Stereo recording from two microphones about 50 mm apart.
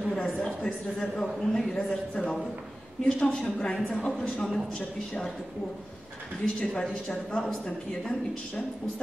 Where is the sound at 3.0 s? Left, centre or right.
Centre.